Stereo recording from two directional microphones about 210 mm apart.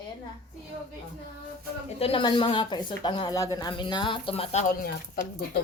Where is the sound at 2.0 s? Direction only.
25° left (ahead or behind).